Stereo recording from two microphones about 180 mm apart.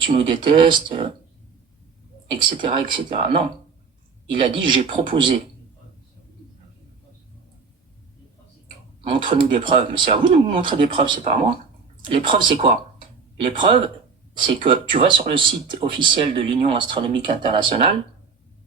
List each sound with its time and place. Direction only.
0.0 s speech: 30° right (ahead or behind)
2.2 s speech: 25° right (ahead or behind)
9.0 s speech: 30° right (ahead or behind)